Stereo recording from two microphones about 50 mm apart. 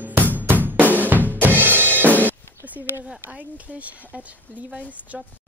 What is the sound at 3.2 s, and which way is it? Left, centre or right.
Speech, right.